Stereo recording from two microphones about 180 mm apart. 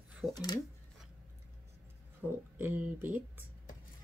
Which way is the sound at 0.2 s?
35° right (ahead or behind).